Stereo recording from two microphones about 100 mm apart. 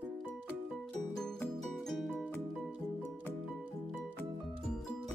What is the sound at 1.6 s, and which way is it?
Music, centre (ahead or behind).